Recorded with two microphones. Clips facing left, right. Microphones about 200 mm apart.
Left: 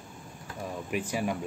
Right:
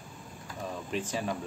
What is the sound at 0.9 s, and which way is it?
Speech, 10° left (ahead or behind).